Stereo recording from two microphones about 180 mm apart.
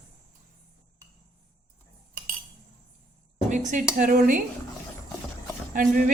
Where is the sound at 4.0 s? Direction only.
50° right (ahead or behind).